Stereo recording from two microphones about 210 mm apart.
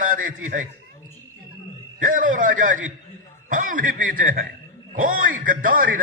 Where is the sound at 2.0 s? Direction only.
40° right (ahead or behind).